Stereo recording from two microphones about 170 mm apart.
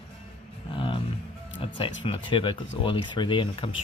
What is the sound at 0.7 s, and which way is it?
Speech, 30° left (ahead or behind).